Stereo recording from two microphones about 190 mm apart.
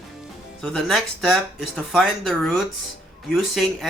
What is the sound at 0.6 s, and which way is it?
Speech, centre (ahead or behind).